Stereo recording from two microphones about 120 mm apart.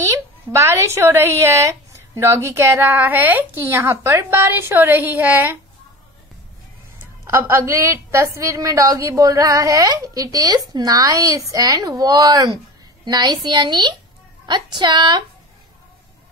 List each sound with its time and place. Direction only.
0.0 s a woman's voice: 25° right (ahead or behind)
7.2 s a woman's voice: 20° right (ahead or behind); by 15.2 s 40° right (ahead or behind)